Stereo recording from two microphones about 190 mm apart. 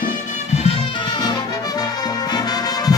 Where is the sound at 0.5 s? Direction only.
30° left (ahead or behind).